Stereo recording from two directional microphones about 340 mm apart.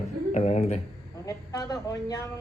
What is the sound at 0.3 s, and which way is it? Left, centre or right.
A woman's voice, centre.